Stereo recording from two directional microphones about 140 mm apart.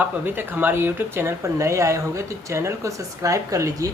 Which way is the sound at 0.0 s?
15° right (ahead or behind).